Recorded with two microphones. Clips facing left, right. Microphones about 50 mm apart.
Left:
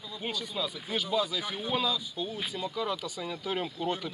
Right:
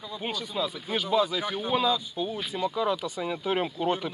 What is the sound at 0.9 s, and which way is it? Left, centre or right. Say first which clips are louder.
Speech: right 5 dB; right.